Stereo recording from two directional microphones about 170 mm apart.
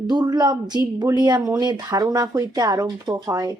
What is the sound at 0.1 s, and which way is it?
Speech, 25° right (ahead or behind).